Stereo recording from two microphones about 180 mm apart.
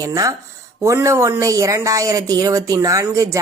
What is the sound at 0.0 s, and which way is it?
Speech, 20° right (ahead or behind).